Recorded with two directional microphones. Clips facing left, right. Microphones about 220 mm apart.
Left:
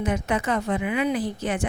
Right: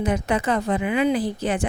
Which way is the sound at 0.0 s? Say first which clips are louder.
Right 2 dB; 35° right (ahead or behind).